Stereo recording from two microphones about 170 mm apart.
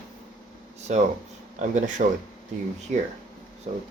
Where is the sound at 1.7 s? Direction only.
45° right (ahead or behind).